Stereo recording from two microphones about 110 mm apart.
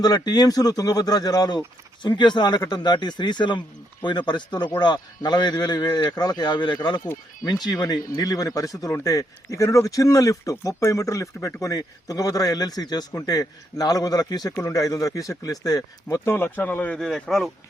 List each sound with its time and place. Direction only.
0.0 s speech: 40° left (ahead or behind); by 17.0 s 15° left (ahead or behind)
17.0 s speech: 5° left (ahead or behind)